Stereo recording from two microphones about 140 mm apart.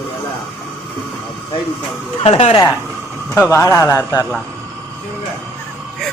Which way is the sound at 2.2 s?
45° left (ahead or behind).